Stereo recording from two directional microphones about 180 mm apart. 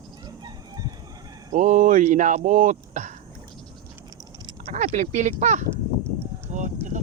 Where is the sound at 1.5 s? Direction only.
40° right (ahead or behind).